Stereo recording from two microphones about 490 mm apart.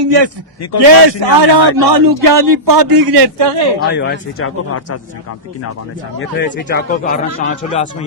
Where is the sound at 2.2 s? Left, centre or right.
Right.